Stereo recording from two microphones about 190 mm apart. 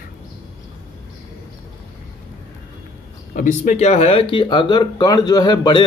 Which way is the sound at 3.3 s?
40° left (ahead or behind).